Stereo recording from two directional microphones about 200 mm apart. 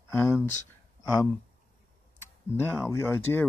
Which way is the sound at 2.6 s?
10° left (ahead or behind).